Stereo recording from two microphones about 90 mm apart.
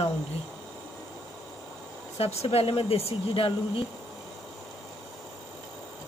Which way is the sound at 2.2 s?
90° left.